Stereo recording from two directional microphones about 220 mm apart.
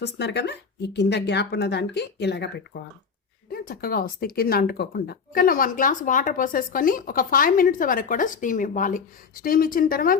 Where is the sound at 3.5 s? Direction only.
40° left (ahead or behind).